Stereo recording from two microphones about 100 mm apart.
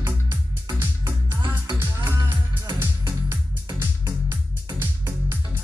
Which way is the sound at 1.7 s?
25° right (ahead or behind).